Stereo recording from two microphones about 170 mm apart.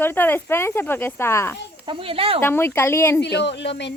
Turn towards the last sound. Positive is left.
turn(degrees=90)